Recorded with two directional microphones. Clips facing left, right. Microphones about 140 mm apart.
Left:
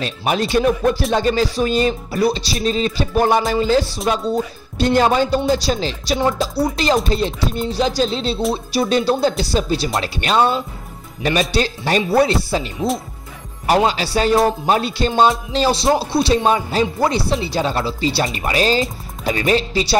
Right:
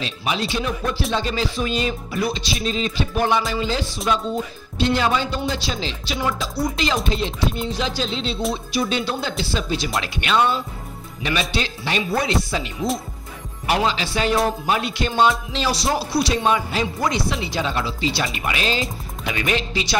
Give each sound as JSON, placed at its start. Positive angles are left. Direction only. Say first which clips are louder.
{"t": 0.0, "sound": "music", "louder": "left 5 dB", "side_deg": 50}
{"t": 1.1, "sound": "speech", "louder": "left 6 dB", "side_deg": 45}
{"t": 4.1, "sound": "music", "louder": "left 3 dB", "side_deg": 45}
{"t": 6.1, "sound": "music", "louder": "left 6 dB", "side_deg": 25}
{"t": 7.1, "sound": "speech", "louder": "left 4 dB", "side_deg": 40}
{"t": 13.7, "sound": "speech", "louder": "left 5 dB", "side_deg": 40}